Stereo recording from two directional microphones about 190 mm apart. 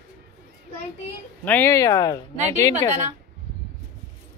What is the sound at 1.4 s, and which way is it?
Speech, 10° left (ahead or behind).